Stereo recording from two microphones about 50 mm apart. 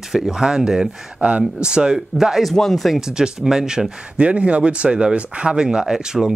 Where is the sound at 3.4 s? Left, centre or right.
Centre.